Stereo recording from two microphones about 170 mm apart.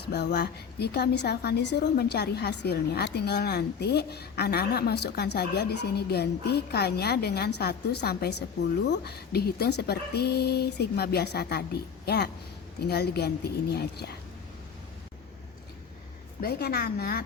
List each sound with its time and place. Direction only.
0.0 s a woman's voice: 80° left
16.4 s a woman's voice: 65° left (ahead or behind)